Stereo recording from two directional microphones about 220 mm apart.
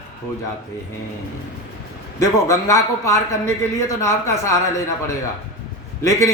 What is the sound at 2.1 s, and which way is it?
Speech, 15° left (ahead or behind).